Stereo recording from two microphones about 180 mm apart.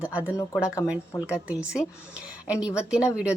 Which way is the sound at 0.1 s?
5° right (ahead or behind).